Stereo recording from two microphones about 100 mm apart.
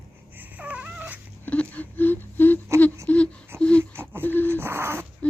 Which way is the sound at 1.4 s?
15° left (ahead or behind).